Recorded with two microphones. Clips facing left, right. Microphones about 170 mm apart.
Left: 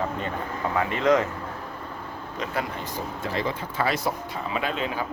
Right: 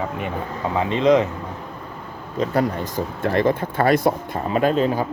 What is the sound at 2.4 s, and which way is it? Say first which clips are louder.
Speech: right 10 dB; 40° right (ahead or behind).